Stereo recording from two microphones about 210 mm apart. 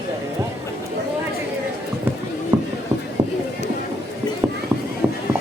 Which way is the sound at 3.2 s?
20° right (ahead or behind).